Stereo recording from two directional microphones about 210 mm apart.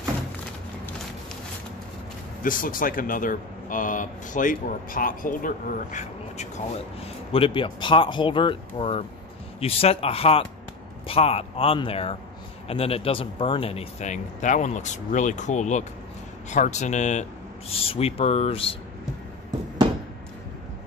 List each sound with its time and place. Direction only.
2.4 s speech: 40° left (ahead or behind)